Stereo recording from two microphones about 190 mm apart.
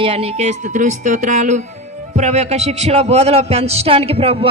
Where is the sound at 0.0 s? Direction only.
30° right (ahead or behind).